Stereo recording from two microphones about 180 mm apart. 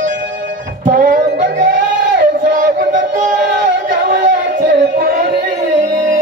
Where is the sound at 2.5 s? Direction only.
45° right (ahead or behind).